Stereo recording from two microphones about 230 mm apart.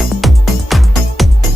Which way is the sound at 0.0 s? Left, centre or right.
Centre.